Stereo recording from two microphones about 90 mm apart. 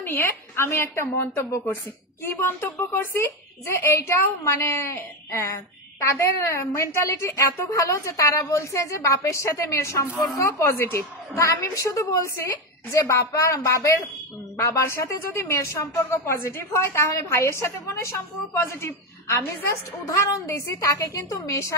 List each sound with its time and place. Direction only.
0.0 s a woman's voice: 30° left (ahead or behind)